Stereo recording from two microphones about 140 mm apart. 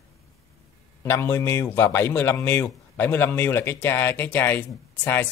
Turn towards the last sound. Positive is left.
turn(degrees=15)  # may be behind; listen again after turning